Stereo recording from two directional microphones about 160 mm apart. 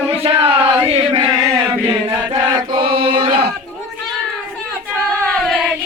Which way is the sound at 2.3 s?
30° right (ahead or behind).